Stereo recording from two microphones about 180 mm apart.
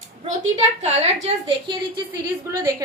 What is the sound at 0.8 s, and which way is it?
A woman's voice, 35° right (ahead or behind).